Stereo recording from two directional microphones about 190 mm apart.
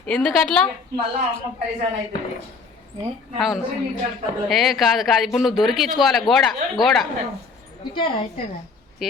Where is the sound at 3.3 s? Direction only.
Centre (ahead or behind).